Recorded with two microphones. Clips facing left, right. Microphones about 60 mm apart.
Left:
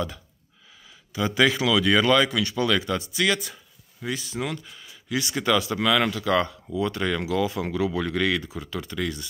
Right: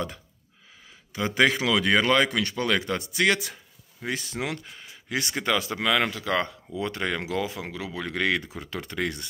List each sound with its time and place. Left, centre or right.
1.1 s speech: right
2.9 s speech: right
4.5 s speech: right
5.3 s speech: centre
7.6 s speech: centre
8.2 s speech: right